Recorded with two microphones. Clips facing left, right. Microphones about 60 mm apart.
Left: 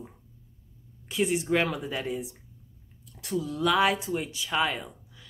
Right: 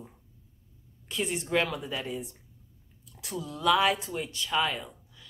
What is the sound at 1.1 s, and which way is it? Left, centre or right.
Speech, centre.